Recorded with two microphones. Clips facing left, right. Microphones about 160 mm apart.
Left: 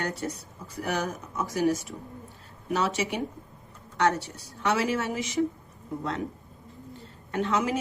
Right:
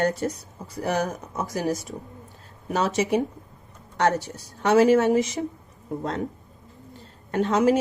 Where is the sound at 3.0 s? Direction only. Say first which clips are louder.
Right 8 dB; 40° right (ahead or behind).